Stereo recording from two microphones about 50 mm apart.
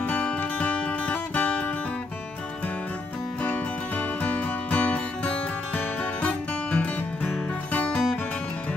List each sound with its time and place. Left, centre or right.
0.0 s music: left
4.2 s music: left